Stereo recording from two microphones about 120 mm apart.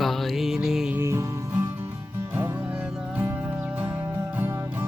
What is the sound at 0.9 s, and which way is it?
Music, 20° right (ahead or behind).